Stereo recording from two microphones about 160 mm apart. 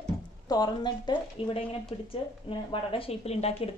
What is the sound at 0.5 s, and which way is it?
A woman's voice, 25° left (ahead or behind).